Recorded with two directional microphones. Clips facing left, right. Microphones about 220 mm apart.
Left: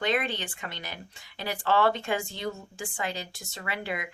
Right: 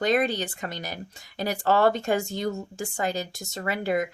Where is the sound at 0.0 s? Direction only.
40° right (ahead or behind).